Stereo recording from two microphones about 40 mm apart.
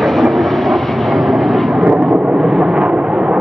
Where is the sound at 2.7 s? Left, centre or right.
Right.